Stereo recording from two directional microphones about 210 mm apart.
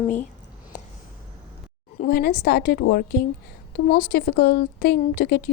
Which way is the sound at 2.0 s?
45° left (ahead or behind).